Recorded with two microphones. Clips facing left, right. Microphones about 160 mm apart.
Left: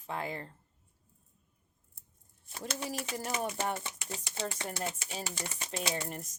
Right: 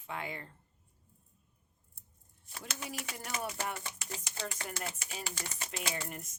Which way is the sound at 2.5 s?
35° left (ahead or behind).